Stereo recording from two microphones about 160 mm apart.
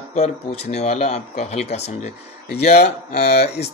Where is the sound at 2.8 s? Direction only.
75° left (ahead or behind).